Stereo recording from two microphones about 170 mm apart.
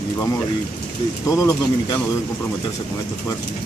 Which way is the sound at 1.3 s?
20° left (ahead or behind).